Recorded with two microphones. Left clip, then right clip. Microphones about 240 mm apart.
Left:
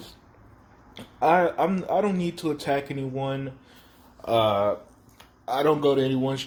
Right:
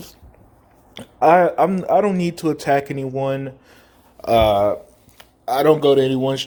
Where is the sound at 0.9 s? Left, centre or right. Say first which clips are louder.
Right 7 dB; right.